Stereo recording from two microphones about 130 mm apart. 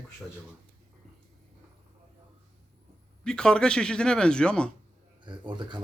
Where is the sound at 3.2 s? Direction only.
5° left (ahead or behind).